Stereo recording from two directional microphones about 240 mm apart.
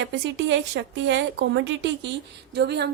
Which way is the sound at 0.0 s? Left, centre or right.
Right.